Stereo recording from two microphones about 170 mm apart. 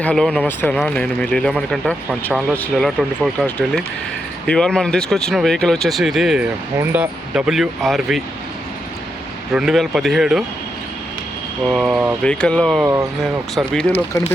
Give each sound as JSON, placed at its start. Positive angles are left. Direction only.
{"t": 0.0, "sound": "speech", "side_deg": 5}
{"t": 9.5, "sound": "speech", "side_deg": 0}
{"t": 11.7, "sound": "speech", "side_deg": -5}
{"t": 12.2, "sound": "speech", "side_deg": 5}
{"t": 12.8, "sound": "speech", "side_deg": -15}
{"t": 13.6, "sound": "speech", "side_deg": 5}